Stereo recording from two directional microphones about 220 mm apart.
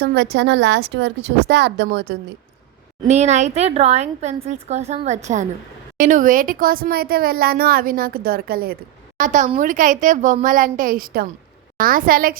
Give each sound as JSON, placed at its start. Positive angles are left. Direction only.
{"t": 0.0, "sound": "a woman's voice", "side_deg": -45}
{"t": 3.1, "sound": "speech", "side_deg": -30}